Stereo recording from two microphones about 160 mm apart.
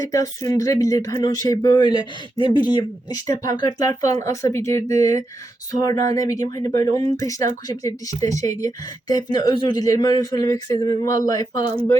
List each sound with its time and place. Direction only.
0.1 s speech: 20° left (ahead or behind)